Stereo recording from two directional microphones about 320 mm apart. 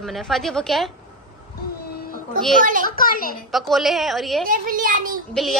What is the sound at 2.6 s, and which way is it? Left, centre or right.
Speech, right.